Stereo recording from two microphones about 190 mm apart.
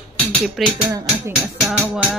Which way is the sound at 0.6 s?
Centre (ahead or behind).